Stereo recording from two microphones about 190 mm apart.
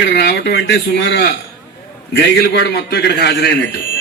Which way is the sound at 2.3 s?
65° left (ahead or behind).